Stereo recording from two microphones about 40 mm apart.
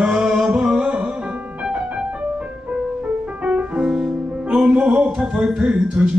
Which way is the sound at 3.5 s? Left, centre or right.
Right.